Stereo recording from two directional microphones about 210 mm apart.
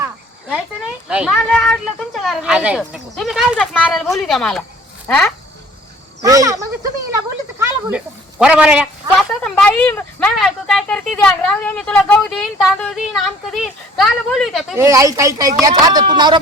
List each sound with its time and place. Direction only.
1.0 s speech: 5° right (ahead or behind)
6.2 s speech: 15° right (ahead or behind); by 14.8 s centre (ahead or behind)
14.8 s speech: 15° right (ahead or behind)